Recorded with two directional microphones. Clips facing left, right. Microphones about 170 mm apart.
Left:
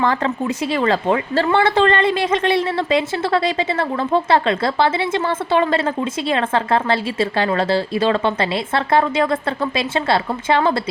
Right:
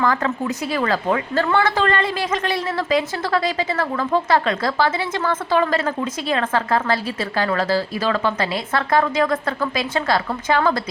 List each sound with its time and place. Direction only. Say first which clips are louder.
0.0 s speech: left 1 dB; 25° left (ahead or behind)